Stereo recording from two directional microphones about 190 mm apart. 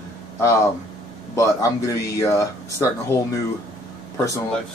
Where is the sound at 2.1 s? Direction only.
15° left (ahead or behind).